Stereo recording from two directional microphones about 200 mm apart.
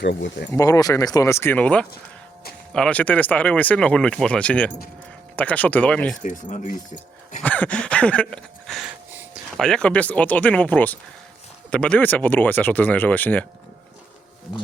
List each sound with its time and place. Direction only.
0.0 s speech: 60° left (ahead or behind)
0.5 s speech: 15° left (ahead or behind)
6.2 s speech: 40° left (ahead or behind)
7.4 s a sound: 5° left (ahead or behind)
9.1 s speech: centre (ahead or behind)